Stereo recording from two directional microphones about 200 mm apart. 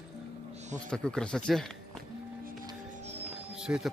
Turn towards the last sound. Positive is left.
turn(degrees=-5)  # may be behind; listen again after turning